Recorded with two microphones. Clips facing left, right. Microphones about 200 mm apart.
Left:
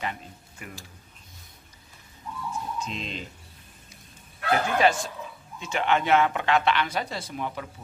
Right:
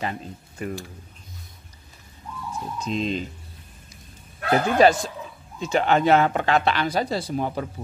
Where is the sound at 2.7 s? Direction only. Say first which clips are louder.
Right 8 dB; 40° right (ahead or behind).